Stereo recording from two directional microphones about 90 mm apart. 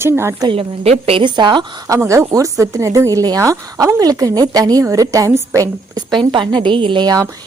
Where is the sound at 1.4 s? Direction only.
55° right (ahead or behind).